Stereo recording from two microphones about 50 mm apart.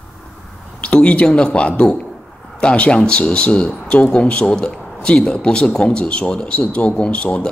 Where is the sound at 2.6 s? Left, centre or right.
Left.